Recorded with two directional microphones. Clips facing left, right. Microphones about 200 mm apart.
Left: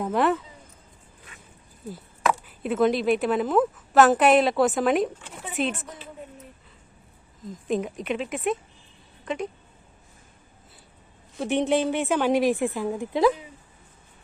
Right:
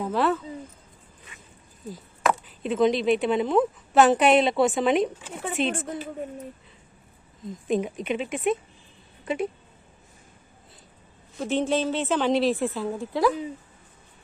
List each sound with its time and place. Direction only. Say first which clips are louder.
0.0 s a woman's voice: left 1 dB; 15° left (ahead or behind)
2.6 s a woman's voice: even; 5° left (ahead or behind)
5.7 s a woman's voice: right 9 dB; 50° right (ahead or behind)
7.4 s a woman's voice: right 1 dB; centre (ahead or behind)
11.3 s a woman's voice: left 2 dB; 15° left (ahead or behind)